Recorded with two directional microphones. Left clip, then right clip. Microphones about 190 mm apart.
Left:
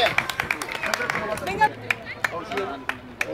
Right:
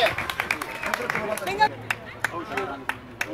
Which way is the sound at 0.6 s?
50° left (ahead or behind).